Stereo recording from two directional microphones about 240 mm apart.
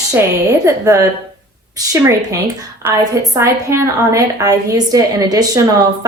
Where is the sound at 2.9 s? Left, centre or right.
Centre.